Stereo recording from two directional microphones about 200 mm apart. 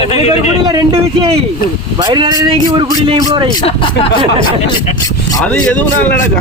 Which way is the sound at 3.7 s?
30° left (ahead or behind).